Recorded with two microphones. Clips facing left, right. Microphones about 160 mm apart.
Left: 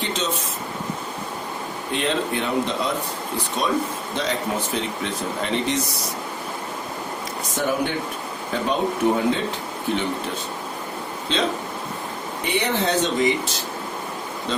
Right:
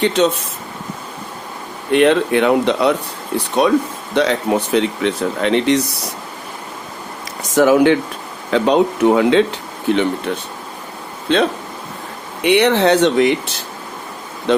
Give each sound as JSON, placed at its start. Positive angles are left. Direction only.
{"t": 0.0, "sound": "speech", "side_deg": -65}
{"t": 1.9, "sound": "speech", "side_deg": -65}
{"t": 7.5, "sound": "speech", "side_deg": -90}
{"t": 9.9, "sound": "speech", "side_deg": -70}
{"t": 11.3, "sound": "speech", "side_deg": -60}
{"t": 12.4, "sound": "speech", "side_deg": -75}